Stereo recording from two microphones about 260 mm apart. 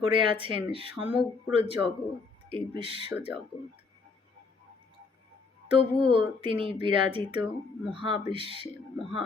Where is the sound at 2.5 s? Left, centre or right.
Centre.